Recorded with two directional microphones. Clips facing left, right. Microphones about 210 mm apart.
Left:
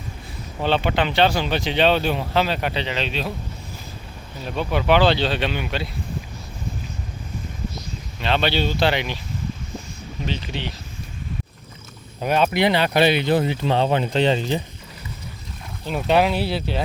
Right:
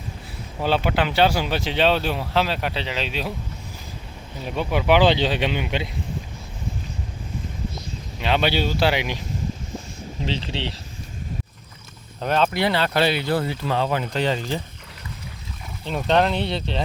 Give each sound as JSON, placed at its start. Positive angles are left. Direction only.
{"t": 0.6, "sound": "speech", "side_deg": -5}
{"t": 4.4, "sound": "speech", "side_deg": -10}
{"t": 8.2, "sound": "speech", "side_deg": -10}
{"t": 10.2, "sound": "speech", "side_deg": -30}
{"t": 12.2, "sound": "speech", "side_deg": 10}
{"t": 15.9, "sound": "speech", "side_deg": 5}